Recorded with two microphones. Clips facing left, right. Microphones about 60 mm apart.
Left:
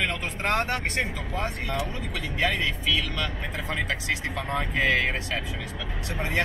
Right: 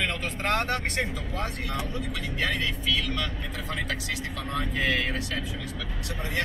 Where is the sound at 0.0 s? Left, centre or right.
Left.